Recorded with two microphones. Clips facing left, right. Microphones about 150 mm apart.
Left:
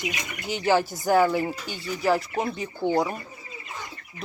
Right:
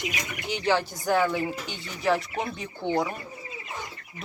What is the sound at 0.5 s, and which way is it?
Speech, 10° left (ahead or behind).